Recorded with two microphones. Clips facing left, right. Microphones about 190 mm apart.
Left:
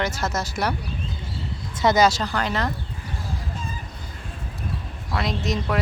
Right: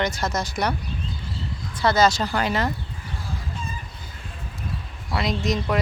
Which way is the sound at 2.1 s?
5° right (ahead or behind).